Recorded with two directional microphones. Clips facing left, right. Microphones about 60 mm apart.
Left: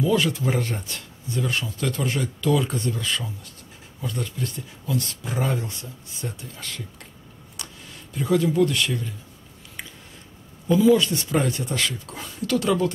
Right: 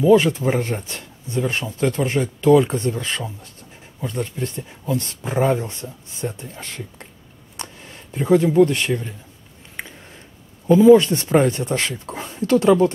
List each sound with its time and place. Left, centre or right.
0.0 s speech: right
9.8 s a sound: right
10.7 s speech: right